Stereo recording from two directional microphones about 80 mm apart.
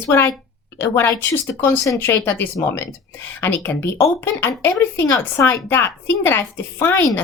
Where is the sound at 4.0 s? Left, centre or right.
Left.